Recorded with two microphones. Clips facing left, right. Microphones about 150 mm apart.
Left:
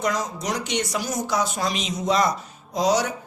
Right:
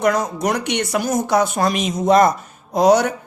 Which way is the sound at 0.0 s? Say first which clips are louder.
Right 7 dB; 60° right (ahead or behind).